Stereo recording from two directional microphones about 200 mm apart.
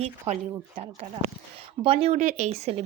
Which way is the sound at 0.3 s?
30° right (ahead or behind).